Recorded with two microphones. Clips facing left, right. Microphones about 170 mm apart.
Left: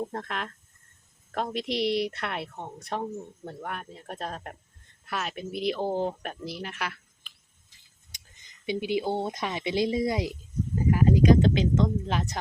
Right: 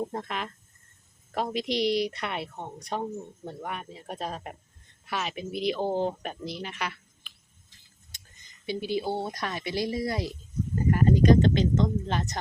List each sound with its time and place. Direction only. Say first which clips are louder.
0.0 s a woman's voice: right 1 dB; centre (ahead or behind)
8.1 s a sound: even; 15° left (ahead or behind)
8.6 s speech: left 2 dB; 15° left (ahead or behind)
10.8 s a woman's voice: even; 5° left (ahead or behind)